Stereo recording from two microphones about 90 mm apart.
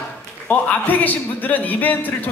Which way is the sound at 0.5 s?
20° left (ahead or behind).